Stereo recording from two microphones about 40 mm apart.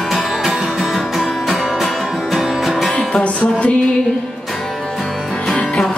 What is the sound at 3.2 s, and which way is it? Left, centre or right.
Music, left.